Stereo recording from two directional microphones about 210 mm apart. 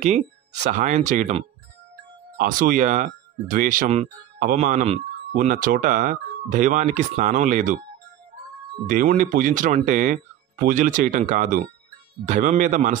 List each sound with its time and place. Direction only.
0.0 s speech: 35° right (ahead or behind)
8.8 s speech: 40° right (ahead or behind)